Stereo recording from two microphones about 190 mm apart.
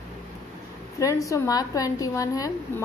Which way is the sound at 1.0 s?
15° left (ahead or behind).